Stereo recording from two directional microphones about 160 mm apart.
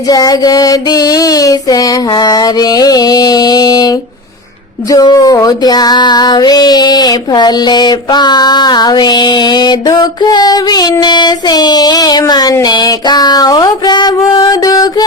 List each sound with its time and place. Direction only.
0.1 s female singing: 25° left (ahead or behind)